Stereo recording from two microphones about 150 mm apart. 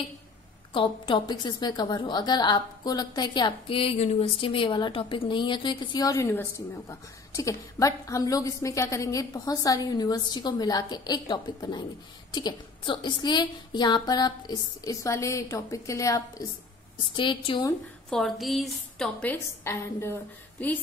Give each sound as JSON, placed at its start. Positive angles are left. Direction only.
{"t": 0.7, "sound": "a woman's voice", "side_deg": 35}
{"t": 17.1, "sound": "a woman's voice", "side_deg": 30}
{"t": 18.1, "sound": "a woman's voice", "side_deg": 0}